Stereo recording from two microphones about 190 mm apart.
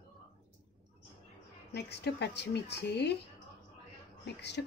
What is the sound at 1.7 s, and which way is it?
A woman's voice, 60° left (ahead or behind).